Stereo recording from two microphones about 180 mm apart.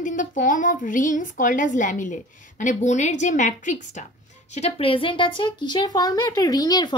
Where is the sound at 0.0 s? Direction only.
45° left (ahead or behind).